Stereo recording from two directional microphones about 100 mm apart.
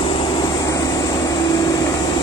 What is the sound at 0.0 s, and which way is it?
Vehicle, 60° left (ahead or behind).